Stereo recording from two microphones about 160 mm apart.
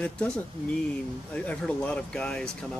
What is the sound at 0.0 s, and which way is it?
Speech, 5° left (ahead or behind).